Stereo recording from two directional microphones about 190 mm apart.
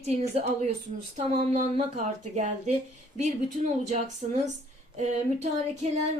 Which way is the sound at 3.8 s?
40° right (ahead or behind).